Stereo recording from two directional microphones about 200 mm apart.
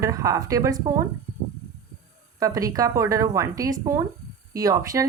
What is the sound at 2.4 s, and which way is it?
A woman's voice, 15° right (ahead or behind).